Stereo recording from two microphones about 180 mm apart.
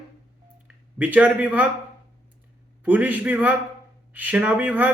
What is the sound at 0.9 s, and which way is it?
Speech, 10° right (ahead or behind).